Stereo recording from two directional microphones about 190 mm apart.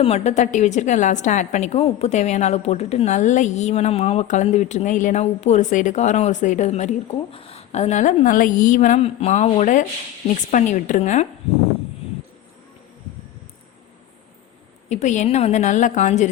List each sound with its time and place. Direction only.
0.0 s a woman's voice: 35° left (ahead or behind)
14.8 s a woman's voice: 40° left (ahead or behind)